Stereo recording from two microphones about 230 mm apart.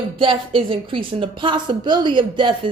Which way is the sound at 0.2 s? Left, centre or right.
Right.